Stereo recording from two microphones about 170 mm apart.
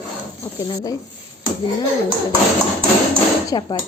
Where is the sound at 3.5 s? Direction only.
25° left (ahead or behind).